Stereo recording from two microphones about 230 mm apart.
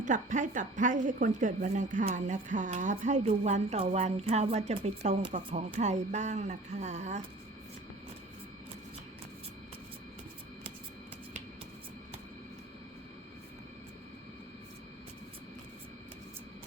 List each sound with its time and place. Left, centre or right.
0.0 s a woman's voice: right